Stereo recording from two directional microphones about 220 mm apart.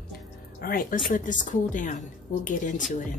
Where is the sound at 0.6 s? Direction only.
40° left (ahead or behind).